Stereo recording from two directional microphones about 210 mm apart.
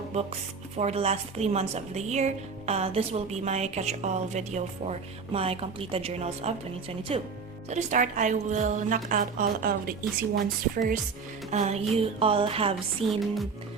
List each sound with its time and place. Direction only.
0.8 s a woman's voice: 30° right (ahead or behind)
13.1 s music: centre (ahead or behind)